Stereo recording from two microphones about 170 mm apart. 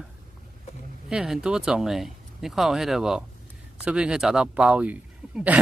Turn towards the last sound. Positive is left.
turn(degrees=-10)  # may be behind; listen again after turning